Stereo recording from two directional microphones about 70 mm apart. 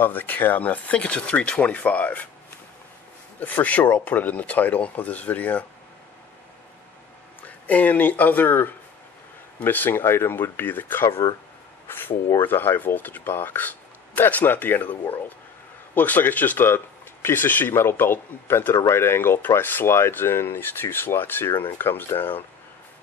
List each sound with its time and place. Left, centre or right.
0.0 s speech: left
3.3 s speech: left
7.4 s speech: left
12.4 s speech: left